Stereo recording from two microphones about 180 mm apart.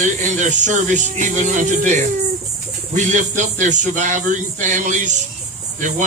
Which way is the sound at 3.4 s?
45° right (ahead or behind).